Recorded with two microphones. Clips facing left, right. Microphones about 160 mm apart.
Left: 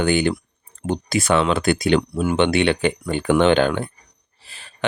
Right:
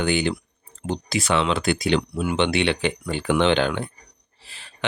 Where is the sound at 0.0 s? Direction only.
50° left (ahead or behind).